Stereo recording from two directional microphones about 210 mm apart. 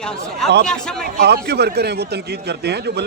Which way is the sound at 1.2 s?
50° right (ahead or behind).